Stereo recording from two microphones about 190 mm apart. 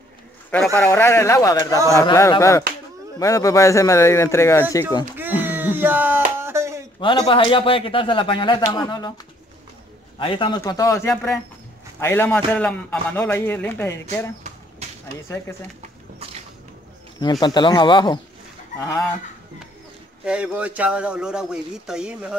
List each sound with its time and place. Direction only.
0.7 s a man's voice: 10° left (ahead or behind)
5.1 s a sound: 10° right (ahead or behind)
7.0 s a man's voice: 25° left (ahead or behind)
10.1 s a man's voice: 25° left (ahead or behind)
14.8 s a sound: 35° right (ahead or behind)
15.2 s a man's voice: 15° left (ahead or behind)
17.2 s a man's voice: 20° left (ahead or behind)
20.2 s speech: 5° right (ahead or behind)